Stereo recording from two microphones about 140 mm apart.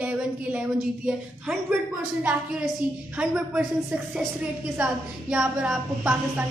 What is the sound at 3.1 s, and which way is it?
A woman's voice, 5° right (ahead or behind).